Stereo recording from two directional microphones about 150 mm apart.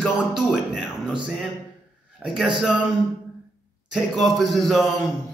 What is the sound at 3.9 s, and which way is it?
Speech, centre (ahead or behind).